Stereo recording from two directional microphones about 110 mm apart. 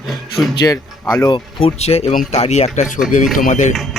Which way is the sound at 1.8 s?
70° left (ahead or behind).